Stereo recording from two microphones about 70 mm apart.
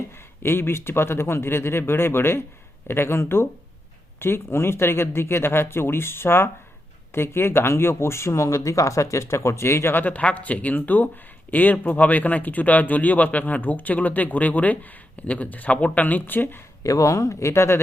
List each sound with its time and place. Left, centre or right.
0.4 s speech: left
16.8 s speech: left